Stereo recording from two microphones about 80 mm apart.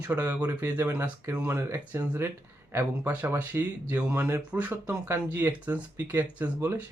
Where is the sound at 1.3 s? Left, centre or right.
Right.